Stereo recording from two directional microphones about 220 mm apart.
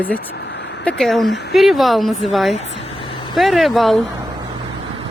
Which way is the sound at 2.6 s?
30° left (ahead or behind).